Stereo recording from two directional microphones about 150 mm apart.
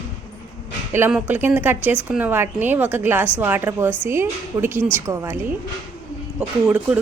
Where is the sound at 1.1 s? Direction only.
10° right (ahead or behind).